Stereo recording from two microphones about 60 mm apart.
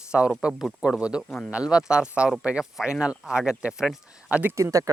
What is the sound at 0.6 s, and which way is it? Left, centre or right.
Speech, centre.